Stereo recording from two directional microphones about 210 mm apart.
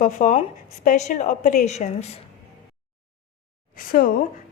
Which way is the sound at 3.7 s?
40° left (ahead or behind).